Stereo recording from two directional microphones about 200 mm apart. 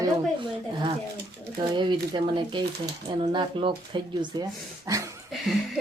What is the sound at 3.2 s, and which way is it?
Speech, 25° right (ahead or behind).